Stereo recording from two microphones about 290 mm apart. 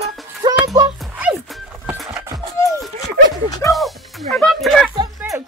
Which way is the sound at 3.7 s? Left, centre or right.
Centre.